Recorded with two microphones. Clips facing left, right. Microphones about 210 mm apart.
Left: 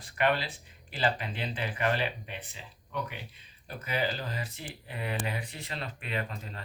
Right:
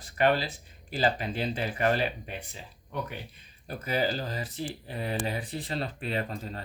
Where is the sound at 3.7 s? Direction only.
40° right (ahead or behind).